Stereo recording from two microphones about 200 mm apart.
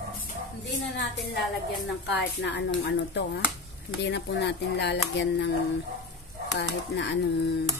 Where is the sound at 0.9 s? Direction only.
60° left (ahead or behind).